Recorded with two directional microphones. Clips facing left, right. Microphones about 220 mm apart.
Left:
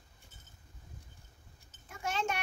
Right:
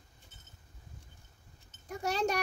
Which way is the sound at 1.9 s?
40° right (ahead or behind).